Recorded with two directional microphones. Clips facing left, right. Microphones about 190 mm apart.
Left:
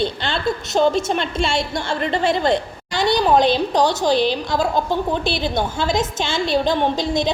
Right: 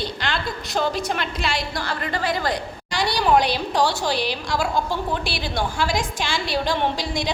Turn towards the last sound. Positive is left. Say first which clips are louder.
# left 5 dB
turn(degrees=20)  # may be behind; listen again after turning